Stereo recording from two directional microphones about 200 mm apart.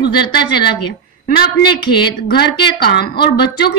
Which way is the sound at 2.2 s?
50° left (ahead or behind).